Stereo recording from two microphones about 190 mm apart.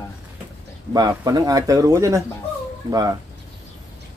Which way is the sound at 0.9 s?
20° right (ahead or behind).